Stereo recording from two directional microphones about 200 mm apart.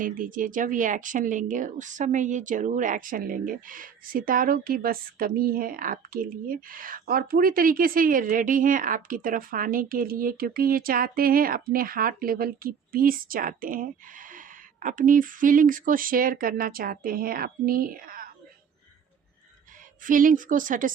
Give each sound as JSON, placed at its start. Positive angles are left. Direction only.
{"t": 0.0, "sound": "speech", "side_deg": -40}
{"t": 20.1, "sound": "speech", "side_deg": -40}